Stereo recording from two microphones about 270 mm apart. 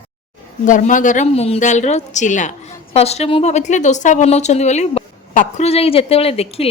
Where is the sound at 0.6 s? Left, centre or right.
Left.